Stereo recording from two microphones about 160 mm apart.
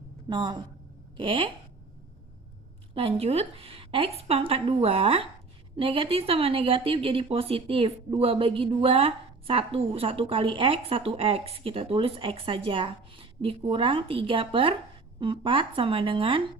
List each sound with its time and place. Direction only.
0.3 s speech: 30° right (ahead or behind)
2.9 s speech: 40° right (ahead or behind)